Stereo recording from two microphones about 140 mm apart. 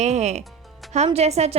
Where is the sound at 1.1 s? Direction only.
50° right (ahead or behind).